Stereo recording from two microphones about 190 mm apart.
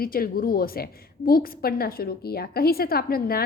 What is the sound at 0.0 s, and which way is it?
A woman's voice, 50° left (ahead or behind).